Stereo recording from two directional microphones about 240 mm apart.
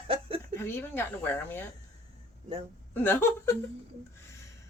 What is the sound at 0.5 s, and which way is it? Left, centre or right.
A woman's voice, centre.